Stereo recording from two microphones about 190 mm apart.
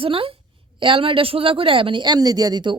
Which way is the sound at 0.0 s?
30° right (ahead or behind).